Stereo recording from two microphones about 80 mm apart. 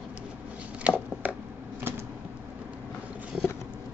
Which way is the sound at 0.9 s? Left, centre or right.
Centre.